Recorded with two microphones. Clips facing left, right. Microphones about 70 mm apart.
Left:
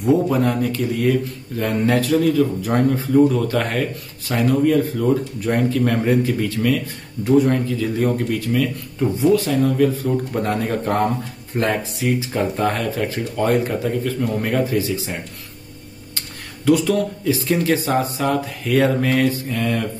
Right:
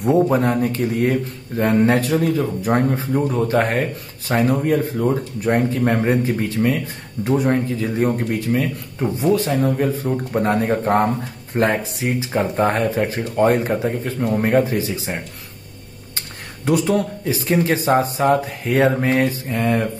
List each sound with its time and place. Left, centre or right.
0.1 s speech: right
16.2 s speech: right